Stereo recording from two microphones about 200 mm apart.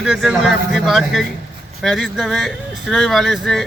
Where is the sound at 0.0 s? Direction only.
Centre (ahead or behind).